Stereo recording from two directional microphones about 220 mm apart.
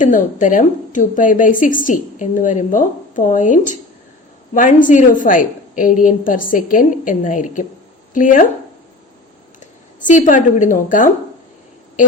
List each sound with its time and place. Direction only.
0.0 s a woman's voice: 35° left (ahead or behind)
10.0 s a woman's voice: 35° left (ahead or behind)